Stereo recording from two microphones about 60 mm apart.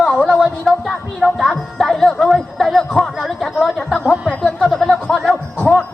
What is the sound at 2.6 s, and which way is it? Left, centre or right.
Chatter, centre.